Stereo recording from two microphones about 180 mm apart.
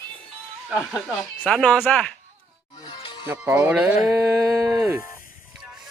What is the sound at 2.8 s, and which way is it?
Music, 25° left (ahead or behind).